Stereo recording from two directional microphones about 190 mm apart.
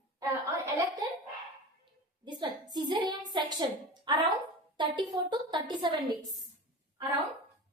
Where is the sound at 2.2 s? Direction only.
25° right (ahead or behind).